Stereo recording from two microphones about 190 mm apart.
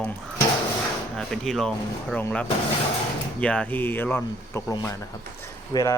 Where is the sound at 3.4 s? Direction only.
5° left (ahead or behind).